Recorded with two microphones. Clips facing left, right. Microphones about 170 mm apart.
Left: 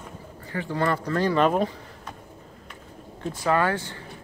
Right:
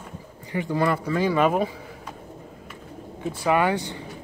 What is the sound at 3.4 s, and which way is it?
Speech, 15° right (ahead or behind).